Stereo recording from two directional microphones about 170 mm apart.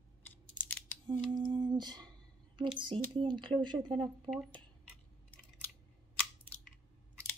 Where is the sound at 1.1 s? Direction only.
30° right (ahead or behind).